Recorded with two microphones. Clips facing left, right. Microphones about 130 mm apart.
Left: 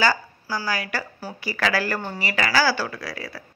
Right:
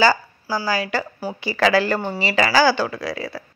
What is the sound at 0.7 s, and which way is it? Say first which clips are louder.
Speech: right 6 dB; 25° right (ahead or behind).